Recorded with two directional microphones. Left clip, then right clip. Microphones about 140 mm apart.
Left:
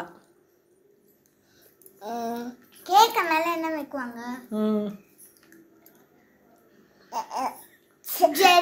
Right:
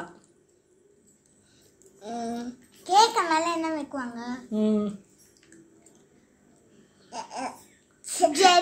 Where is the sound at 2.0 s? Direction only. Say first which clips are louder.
Left 2 dB; 25° right (ahead or behind).